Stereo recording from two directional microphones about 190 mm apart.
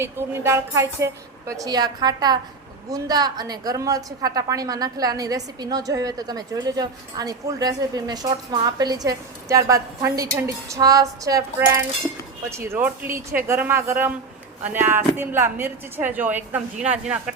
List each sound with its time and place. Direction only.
0.0 s a woman's voice: 15° right (ahead or behind)